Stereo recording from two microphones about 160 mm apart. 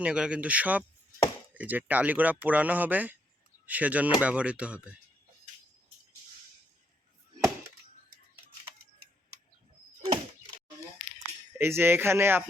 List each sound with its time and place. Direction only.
0.0 s speech: 5° right (ahead or behind)
10.0 s door: 25° right (ahead or behind)
11.5 s speech: 15° right (ahead or behind)